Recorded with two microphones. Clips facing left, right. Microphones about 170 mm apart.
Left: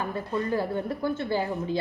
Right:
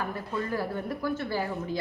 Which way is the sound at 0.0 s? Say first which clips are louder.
Left 3 dB; 20° left (ahead or behind).